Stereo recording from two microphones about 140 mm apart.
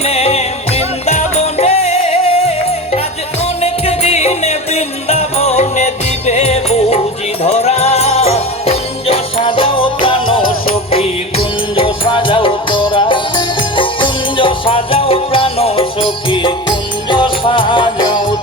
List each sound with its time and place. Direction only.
0.0 s music: 45° left (ahead or behind)
3.6 s music: 50° left (ahead or behind)